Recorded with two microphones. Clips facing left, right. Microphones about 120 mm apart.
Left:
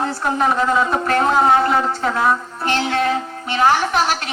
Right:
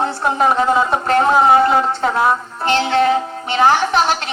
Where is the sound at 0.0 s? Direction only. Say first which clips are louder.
Right 3 dB; 30° right (ahead or behind).